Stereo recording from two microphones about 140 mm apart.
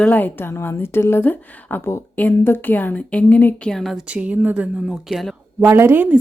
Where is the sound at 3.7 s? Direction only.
Centre (ahead or behind).